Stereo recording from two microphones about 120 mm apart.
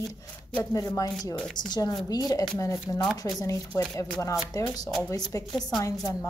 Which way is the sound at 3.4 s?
30° left (ahead or behind).